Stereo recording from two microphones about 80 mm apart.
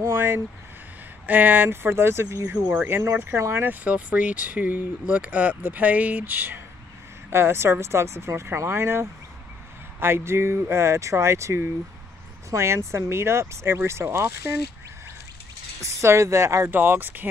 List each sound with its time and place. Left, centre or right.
0.0 s speech: right
3.8 s speech: centre; by 14.5 s right
15.8 s speech: right
16.7 s speech: right